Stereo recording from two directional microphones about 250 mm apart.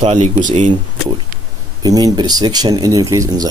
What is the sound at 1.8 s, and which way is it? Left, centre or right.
Speech, centre.